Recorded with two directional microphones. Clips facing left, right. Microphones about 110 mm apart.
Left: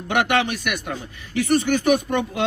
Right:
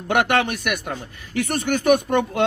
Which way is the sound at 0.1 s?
45° right (ahead or behind).